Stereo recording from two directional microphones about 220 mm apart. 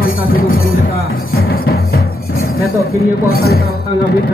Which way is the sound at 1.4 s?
45° left (ahead or behind).